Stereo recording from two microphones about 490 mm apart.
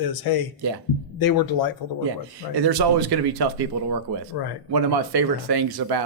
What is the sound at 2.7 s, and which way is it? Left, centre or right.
Speech, right.